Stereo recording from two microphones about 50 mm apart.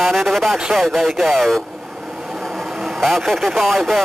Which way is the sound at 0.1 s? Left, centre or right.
Centre.